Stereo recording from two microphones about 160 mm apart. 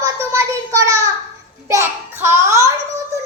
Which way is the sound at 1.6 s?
15° right (ahead or behind).